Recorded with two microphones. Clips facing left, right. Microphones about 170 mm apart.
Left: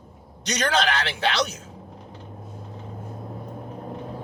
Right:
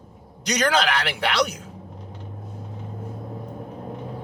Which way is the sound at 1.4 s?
25° left (ahead or behind).